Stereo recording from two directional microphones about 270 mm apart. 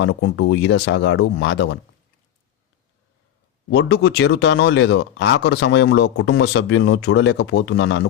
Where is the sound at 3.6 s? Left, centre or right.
Left.